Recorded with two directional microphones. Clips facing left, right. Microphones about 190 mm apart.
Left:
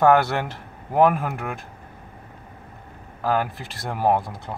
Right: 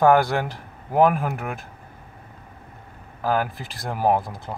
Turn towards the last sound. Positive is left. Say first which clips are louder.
# even
turn(degrees=0)  # may be behind; listen again after turning